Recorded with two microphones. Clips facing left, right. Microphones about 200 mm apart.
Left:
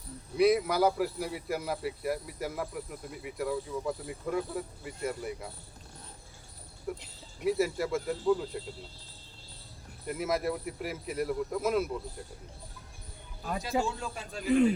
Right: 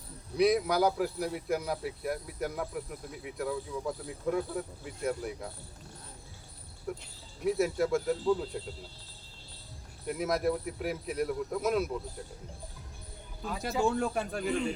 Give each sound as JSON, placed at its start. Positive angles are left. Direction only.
{"t": 0.3, "sound": "speech", "side_deg": 0}
{"t": 6.9, "sound": "speech", "side_deg": 0}
{"t": 10.1, "sound": "speech", "side_deg": 0}
{"t": 13.6, "sound": "speech", "side_deg": -55}